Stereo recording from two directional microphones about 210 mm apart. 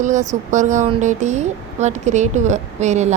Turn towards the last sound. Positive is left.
turn(degrees=-35)  # may be behind; listen again after turning